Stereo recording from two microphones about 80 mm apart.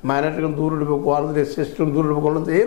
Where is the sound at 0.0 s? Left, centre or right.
Left.